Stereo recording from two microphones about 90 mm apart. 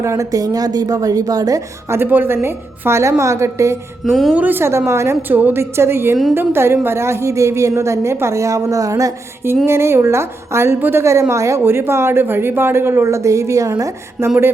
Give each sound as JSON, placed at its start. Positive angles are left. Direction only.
{"t": 0.0, "sound": "a woman's voice", "side_deg": -35}
{"t": 1.9, "sound": "a woman's voice", "side_deg": -25}
{"t": 4.0, "sound": "a woman's voice", "side_deg": 0}
{"t": 4.4, "sound": "a woman's voice", "side_deg": -20}
{"t": 5.3, "sound": "a woman's voice", "side_deg": -20}
{"t": 9.6, "sound": "a woman's voice", "side_deg": -30}